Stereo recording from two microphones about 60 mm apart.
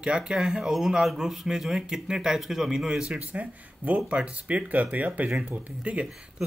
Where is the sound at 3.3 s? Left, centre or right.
Right.